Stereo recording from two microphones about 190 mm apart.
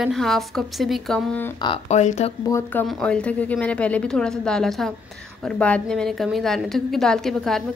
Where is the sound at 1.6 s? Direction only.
30° left (ahead or behind).